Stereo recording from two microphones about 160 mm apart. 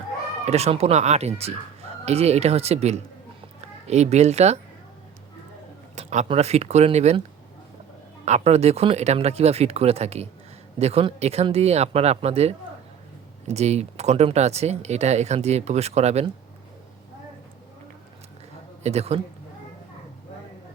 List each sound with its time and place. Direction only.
0.4 s speech: 40° right (ahead or behind)
6.0 s speech: 45° right (ahead or behind)
8.2 s speech: 45° right (ahead or behind)
18.8 s a man's voice: 40° right (ahead or behind)